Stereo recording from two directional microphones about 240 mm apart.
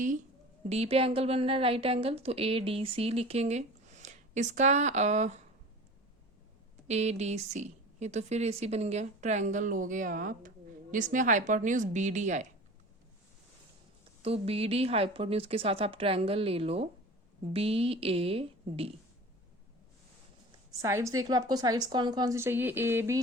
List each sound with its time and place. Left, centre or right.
0.7 s a woman's voice: right
6.8 s a woman's voice: right
14.2 s a woman's voice: right
20.7 s a woman's voice: centre